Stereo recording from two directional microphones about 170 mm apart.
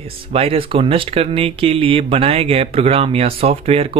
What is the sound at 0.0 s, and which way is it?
Speech, 35° right (ahead or behind).